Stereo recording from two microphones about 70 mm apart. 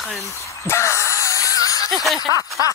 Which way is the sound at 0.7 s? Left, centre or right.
Left.